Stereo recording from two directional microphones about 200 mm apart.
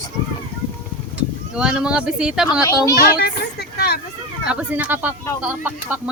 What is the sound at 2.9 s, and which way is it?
Speech, 50° left (ahead or behind).